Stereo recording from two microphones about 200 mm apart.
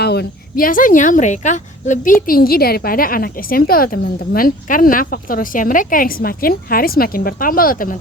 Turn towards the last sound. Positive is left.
turn(degrees=45)  # may be behind; listen again after turning